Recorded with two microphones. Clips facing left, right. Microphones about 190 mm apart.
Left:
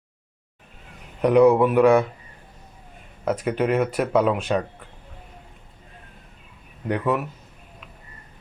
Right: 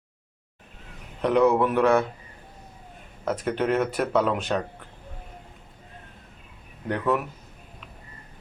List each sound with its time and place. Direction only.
1.2 s speech: 10° left (ahead or behind)
3.2 s speech: 10° left (ahead or behind)
6.8 s speech: 5° left (ahead or behind)